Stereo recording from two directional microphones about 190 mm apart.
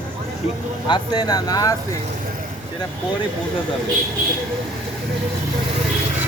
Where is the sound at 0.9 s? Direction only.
20° left (ahead or behind).